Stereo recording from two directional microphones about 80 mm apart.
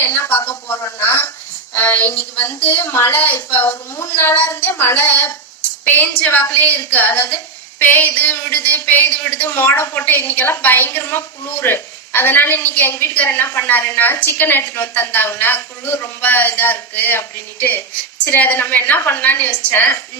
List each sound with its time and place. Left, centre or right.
0.0 s a woman's voice: left